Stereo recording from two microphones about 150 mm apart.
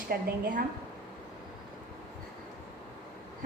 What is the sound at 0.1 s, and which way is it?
Speech, 75° right (ahead or behind).